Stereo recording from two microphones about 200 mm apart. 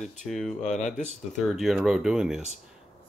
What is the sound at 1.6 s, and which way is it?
Speech, centre (ahead or behind).